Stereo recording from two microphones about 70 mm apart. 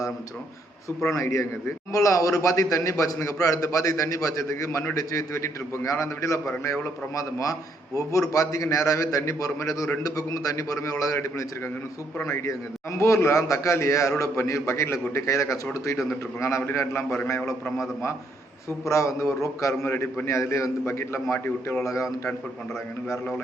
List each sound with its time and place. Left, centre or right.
1.1 s a man's voice: left
10.0 s a man's voice: left
18.9 s a man's voice: left